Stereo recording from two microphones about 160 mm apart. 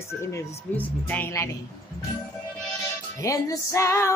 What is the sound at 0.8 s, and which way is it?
Speech, 10° left (ahead or behind).